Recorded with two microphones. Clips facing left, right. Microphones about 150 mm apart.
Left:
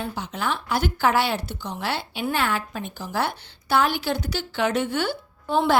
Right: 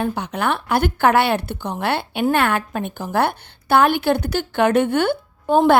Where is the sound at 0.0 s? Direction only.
60° right (ahead or behind).